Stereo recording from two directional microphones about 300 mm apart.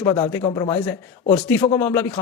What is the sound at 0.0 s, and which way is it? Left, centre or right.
Speech, centre.